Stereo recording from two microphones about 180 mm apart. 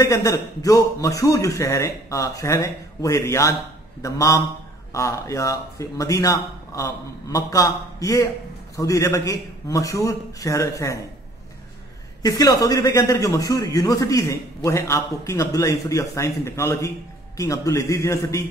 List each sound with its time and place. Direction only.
0.0 s a man's voice: 20° left (ahead or behind)
12.2 s a man's voice: 20° left (ahead or behind)